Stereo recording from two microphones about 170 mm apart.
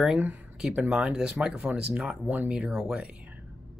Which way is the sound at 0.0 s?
5° right (ahead or behind).